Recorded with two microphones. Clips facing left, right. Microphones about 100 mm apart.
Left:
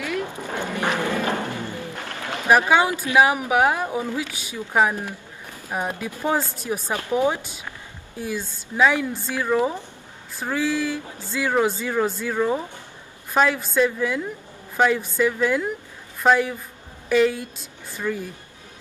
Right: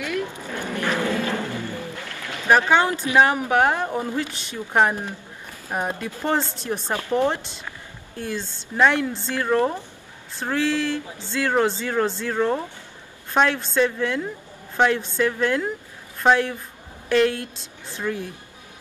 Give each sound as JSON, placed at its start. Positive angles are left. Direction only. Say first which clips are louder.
{"t": 0.6, "sound": "music", "louder": "even", "side_deg": 15}
{"t": 2.2, "sound": "speech", "louder": "even", "side_deg": 15}